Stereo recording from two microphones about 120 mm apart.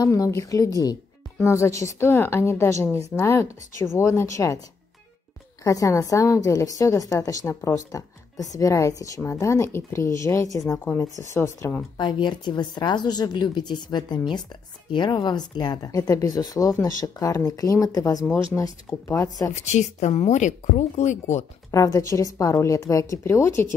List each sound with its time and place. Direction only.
0.0 s a woman's voice: 30° left (ahead or behind)
5.6 s a woman's voice: 25° left (ahead or behind)
12.0 s speech: 40° left (ahead or behind)
18.2 s speech: 10° left (ahead or behind)
19.0 s a woman's voice: 30° left (ahead or behind)
19.5 s speech: 70° left (ahead or behind)
21.6 s a woman's voice: 25° left (ahead or behind)